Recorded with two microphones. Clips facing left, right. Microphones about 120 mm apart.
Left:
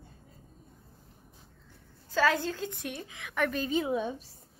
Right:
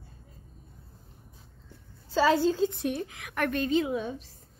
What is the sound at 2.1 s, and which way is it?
Speech, 15° right (ahead or behind).